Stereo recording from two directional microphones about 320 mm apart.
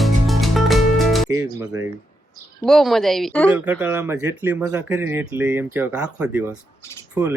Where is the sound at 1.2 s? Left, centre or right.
Centre.